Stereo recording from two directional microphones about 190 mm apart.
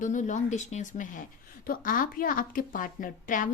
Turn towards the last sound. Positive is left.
turn(degrees=45)  # may be behind; listen again after turning